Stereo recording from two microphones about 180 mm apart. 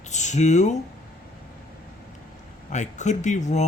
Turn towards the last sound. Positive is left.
turn(degrees=40)  # may be behind; listen again after turning